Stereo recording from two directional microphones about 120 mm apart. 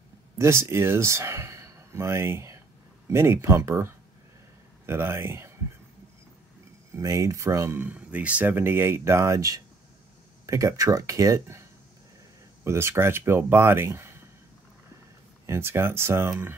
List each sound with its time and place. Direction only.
0.4 s speech: 20° right (ahead or behind)
6.9 s speech: 25° right (ahead or behind)
12.6 s speech: 20° right (ahead or behind)
15.4 s speech: 20° right (ahead or behind)